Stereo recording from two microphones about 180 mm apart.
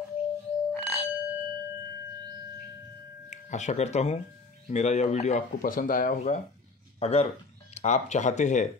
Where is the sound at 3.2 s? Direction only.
40° left (ahead or behind).